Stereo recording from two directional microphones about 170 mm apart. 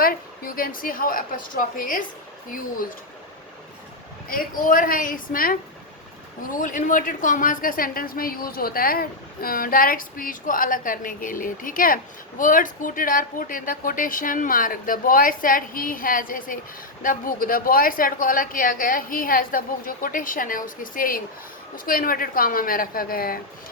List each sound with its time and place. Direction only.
0.0 s a woman's voice: 55° left (ahead or behind)
4.3 s a woman's voice: 55° left (ahead or behind)